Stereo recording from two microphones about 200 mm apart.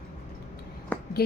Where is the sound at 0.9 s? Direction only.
10° left (ahead or behind).